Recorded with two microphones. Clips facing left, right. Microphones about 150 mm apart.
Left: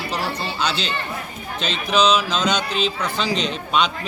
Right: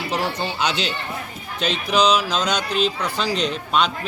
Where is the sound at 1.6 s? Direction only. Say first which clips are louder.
Even; 10° right (ahead or behind).